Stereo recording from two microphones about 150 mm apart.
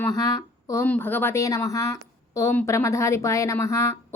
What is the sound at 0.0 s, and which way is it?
Speech, 25° left (ahead or behind).